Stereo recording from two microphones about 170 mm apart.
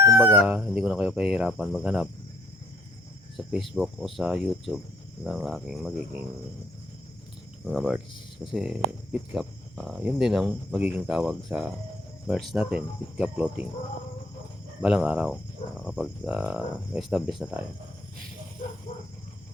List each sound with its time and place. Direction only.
0.2 s speech: 20° right (ahead or behind)
0.4 s speech: 5° right (ahead or behind)
3.3 s speech: centre (ahead or behind)
7.6 s speech: 5° right (ahead or behind)
12.3 s cricket: centre (ahead or behind)
14.8 s speech: 5° right (ahead or behind)